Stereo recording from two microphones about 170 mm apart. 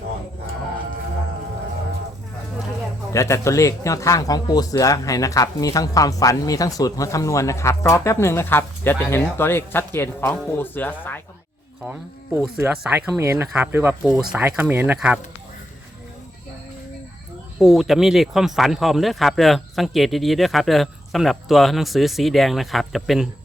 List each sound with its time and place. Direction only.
3.1 s speech: 15° left (ahead or behind)
12.5 s speech: 10° right (ahead or behind)
14.0 s speech: centre (ahead or behind)
17.6 s speech: centre (ahead or behind)